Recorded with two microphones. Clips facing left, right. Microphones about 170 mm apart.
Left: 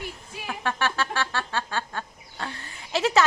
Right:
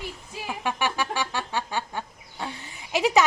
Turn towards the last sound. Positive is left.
turn(degrees=-15)  # may be behind; listen again after turning